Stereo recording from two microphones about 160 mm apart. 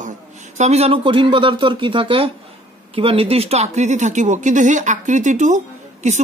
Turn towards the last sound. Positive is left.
turn(degrees=-45)  # may be behind; listen again after turning